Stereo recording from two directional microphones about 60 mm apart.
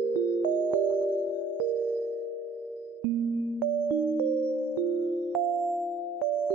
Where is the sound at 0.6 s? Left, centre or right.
Right.